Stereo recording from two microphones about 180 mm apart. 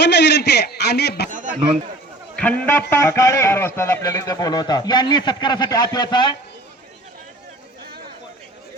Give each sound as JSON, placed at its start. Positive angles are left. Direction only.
{"t": 0.0, "sound": "a man's voice", "side_deg": 70}
{"t": 1.3, "sound": "a sound", "side_deg": -45}
{"t": 2.3, "sound": "a man's voice", "side_deg": 5}